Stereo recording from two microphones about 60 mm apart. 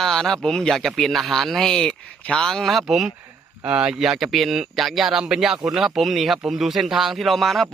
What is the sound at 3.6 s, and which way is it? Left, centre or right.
A man's voice, centre.